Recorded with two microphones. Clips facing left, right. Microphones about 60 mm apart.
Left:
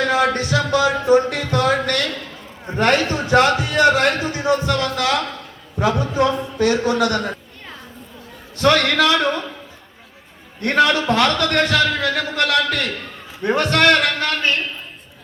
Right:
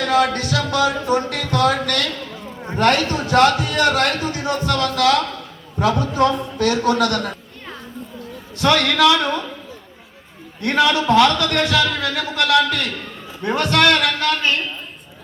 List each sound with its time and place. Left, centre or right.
0.1 s music: left
2.7 s a man's voice: left
8.5 s a man's voice: left
10.6 s a man's voice: left